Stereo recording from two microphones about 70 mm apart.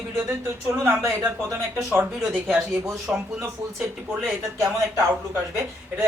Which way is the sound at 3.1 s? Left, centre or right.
Centre.